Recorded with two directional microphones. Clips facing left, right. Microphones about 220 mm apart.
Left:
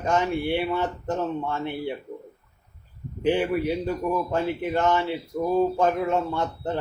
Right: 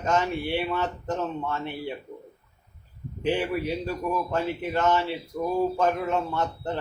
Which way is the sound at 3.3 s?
20° left (ahead or behind).